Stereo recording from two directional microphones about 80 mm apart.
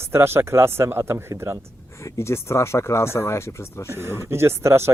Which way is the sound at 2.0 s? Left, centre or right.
Left.